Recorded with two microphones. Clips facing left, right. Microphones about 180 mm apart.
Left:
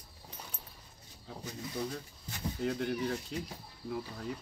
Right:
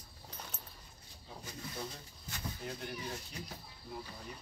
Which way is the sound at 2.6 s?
75° left (ahead or behind).